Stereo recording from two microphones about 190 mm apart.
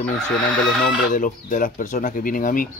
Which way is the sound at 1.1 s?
45° left (ahead or behind).